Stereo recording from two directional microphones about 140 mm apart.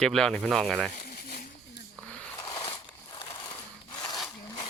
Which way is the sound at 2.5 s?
35° left (ahead or behind).